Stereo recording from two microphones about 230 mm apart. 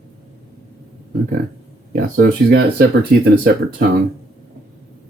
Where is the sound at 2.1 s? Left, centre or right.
Right.